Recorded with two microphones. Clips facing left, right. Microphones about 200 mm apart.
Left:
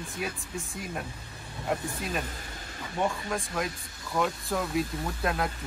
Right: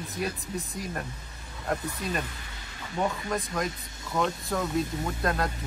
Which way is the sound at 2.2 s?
40° left (ahead or behind).